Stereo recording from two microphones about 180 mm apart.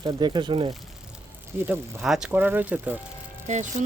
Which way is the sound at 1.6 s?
5° right (ahead or behind).